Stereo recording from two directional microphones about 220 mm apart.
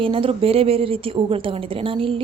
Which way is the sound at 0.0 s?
25° right (ahead or behind).